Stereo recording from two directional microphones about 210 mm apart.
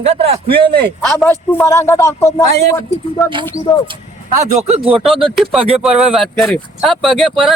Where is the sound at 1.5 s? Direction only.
10° left (ahead or behind).